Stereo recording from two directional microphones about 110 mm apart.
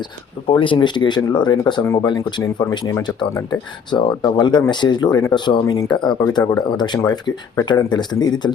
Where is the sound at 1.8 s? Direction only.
30° left (ahead or behind).